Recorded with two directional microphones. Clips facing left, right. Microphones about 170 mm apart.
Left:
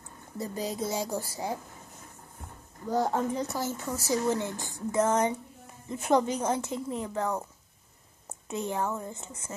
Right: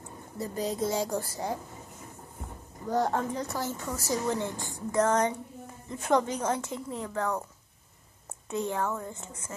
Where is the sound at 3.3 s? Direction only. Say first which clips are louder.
Left 2 dB; 20° left (ahead or behind).